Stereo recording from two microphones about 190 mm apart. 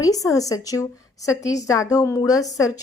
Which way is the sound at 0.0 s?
20° left (ahead or behind).